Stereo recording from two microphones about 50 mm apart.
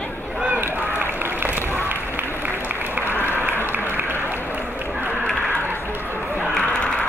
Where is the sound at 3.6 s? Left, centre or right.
Right.